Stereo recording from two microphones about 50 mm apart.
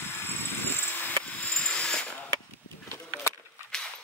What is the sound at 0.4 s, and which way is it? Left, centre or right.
Vehicle, left.